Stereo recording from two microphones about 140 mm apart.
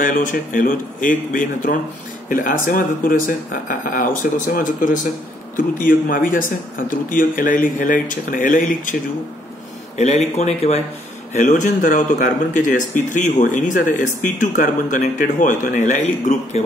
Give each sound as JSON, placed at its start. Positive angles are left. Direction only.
{"t": 0.0, "sound": "speech", "side_deg": 70}
{"t": 9.9, "sound": "speech", "side_deg": 55}
{"t": 11.3, "sound": "speech", "side_deg": 60}